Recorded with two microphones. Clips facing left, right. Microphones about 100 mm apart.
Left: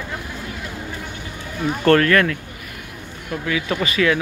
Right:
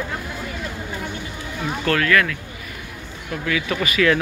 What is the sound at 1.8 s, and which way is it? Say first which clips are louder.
Speech: left 4 dB; 40° left (ahead or behind).